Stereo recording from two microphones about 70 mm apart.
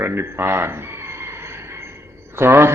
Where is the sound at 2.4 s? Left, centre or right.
Right.